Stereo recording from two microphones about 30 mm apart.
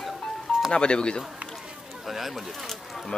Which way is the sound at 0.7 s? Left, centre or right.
Left.